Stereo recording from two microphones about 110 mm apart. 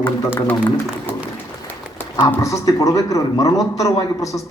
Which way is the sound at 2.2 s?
30° left (ahead or behind).